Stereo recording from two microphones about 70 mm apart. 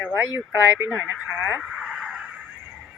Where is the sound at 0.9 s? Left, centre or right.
Centre.